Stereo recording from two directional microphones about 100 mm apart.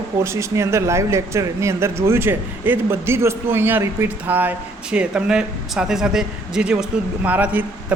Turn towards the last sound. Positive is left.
turn(degrees=-15)  # may be behind; listen again after turning